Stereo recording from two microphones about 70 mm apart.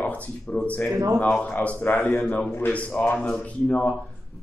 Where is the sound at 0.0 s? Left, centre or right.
Centre.